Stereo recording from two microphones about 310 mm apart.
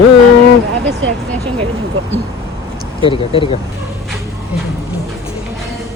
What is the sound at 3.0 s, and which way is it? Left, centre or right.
Speech, centre.